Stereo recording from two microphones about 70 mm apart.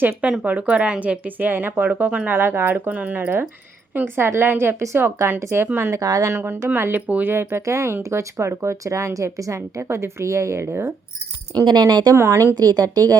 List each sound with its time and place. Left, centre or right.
0.4 s speech: centre
2.3 s a woman's voice: right
6.0 s speech: right
6.3 s a woman's voice: right
7.3 s a woman's voice: right
11.6 s speech: right
12.1 s a woman's voice: right
12.5 s speech: right